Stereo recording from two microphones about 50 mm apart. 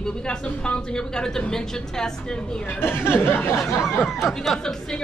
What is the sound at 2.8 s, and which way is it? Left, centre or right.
Speech, left.